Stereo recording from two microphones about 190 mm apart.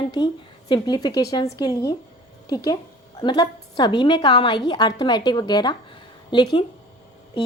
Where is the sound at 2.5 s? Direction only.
20° left (ahead or behind).